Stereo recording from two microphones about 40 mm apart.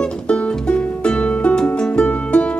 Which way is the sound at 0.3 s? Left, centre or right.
Left.